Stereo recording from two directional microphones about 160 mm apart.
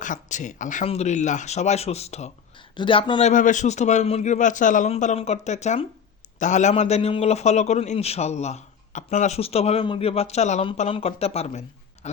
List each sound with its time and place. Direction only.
0.0 s a man's voice: 50° left (ahead or behind)
2.7 s a man's voice: 30° left (ahead or behind)